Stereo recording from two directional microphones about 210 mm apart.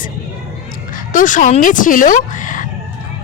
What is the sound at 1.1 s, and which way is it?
A woman's voice, 40° left (ahead or behind).